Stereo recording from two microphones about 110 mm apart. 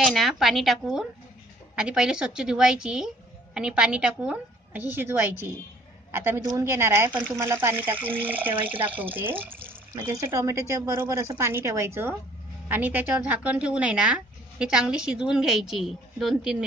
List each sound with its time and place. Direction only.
0.0 s a woman's voice: centre (ahead or behind)
4.9 s a woman's voice: 20° right (ahead or behind); by 16.6 s 5° right (ahead or behind)